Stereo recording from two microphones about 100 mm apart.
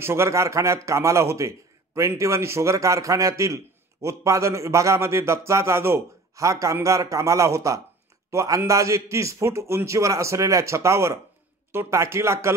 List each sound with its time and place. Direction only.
0.0 s a man's voice: 25° right (ahead or behind)